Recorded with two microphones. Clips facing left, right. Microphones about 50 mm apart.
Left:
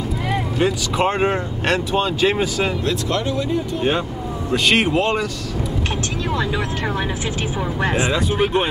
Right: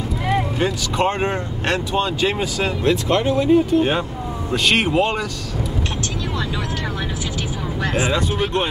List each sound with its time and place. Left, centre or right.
0.3 s speech: centre
2.8 s speech: right
4.5 s speech: centre
7.9 s speech: centre